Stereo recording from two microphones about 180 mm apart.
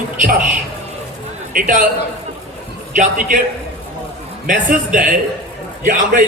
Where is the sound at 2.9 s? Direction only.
45° right (ahead or behind).